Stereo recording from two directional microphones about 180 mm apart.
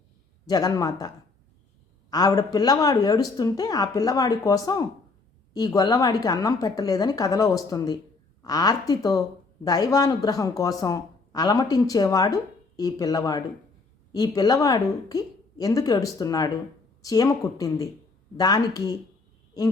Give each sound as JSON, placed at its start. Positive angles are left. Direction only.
{"t": 0.4, "sound": "a woman's voice", "side_deg": 20}